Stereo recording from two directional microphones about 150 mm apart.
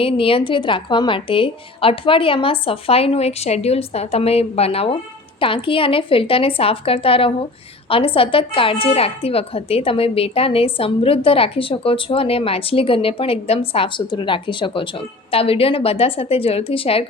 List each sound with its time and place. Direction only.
0.0 s speech: 40° left (ahead or behind)